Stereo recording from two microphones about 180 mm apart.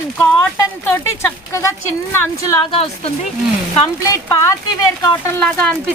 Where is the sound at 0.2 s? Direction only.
15° left (ahead or behind).